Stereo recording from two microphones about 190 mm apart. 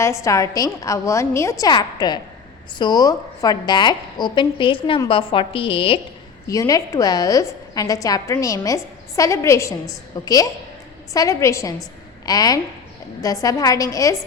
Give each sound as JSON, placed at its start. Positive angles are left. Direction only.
{"t": 0.0, "sound": "a woman's voice", "side_deg": 15}
{"t": 6.5, "sound": "a woman's voice", "side_deg": 20}